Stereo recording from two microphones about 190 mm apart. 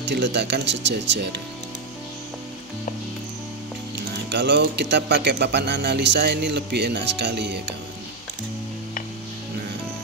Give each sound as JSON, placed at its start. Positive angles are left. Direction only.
{"t": 0.0, "sound": "speech", "side_deg": -65}
{"t": 4.3, "sound": "speech", "side_deg": -65}